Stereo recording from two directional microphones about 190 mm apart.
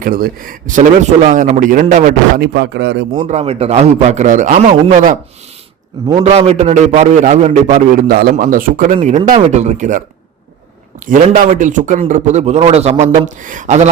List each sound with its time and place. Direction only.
0.0 s a man's voice: 50° right (ahead or behind)
3.2 s a man's voice: 35° right (ahead or behind)
6.2 s a man's voice: 35° right (ahead or behind)
11.0 s a man's voice: 45° right (ahead or behind)